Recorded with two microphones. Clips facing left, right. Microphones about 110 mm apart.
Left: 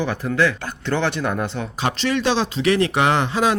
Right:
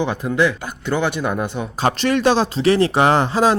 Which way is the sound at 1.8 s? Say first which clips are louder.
Right 4 dB; 50° right (ahead or behind).